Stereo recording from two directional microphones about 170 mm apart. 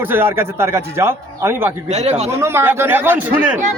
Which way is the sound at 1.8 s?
40° right (ahead or behind).